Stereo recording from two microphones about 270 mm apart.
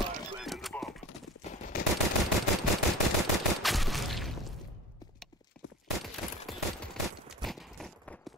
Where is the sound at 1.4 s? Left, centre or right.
Left.